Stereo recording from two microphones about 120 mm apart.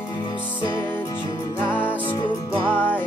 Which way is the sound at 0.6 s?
40° left (ahead or behind).